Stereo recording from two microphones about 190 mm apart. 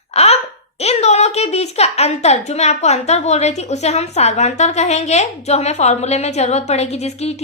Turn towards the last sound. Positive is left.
turn(degrees=35)  # may be behind; listen again after turning